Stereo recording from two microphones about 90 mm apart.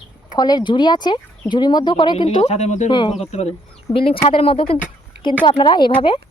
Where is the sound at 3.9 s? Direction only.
90° left.